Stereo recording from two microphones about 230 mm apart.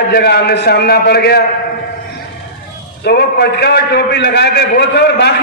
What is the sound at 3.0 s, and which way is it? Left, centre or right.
A man's voice, left.